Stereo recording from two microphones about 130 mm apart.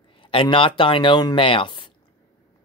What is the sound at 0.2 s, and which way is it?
Speech, 40° left (ahead or behind).